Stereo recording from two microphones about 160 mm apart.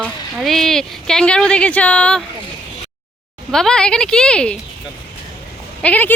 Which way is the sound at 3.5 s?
5° left (ahead or behind).